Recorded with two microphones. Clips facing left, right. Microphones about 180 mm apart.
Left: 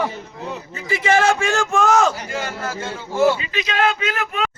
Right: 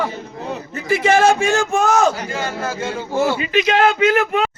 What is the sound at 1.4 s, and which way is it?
Speech, 5° right (ahead or behind).